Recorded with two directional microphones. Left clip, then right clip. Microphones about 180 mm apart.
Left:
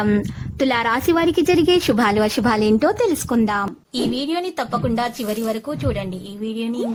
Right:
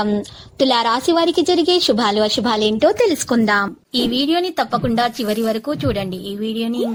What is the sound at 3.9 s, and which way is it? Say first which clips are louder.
Speech: right 6 dB; 25° right (ahead or behind).